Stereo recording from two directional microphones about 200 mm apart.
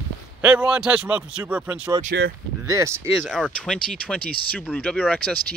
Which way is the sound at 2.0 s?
60° right (ahead or behind).